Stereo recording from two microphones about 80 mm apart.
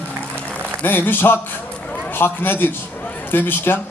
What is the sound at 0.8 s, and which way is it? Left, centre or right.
A man's voice, left.